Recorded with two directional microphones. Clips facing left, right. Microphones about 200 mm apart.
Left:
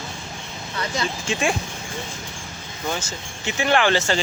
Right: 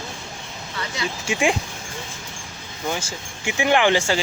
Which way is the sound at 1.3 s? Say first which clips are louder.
Right 3 dB; 15° right (ahead or behind).